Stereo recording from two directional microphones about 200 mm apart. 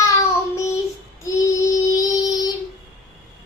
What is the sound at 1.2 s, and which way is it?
Child singing, 15° left (ahead or behind).